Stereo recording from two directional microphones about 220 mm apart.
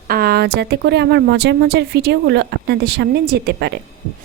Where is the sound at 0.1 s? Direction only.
45° right (ahead or behind).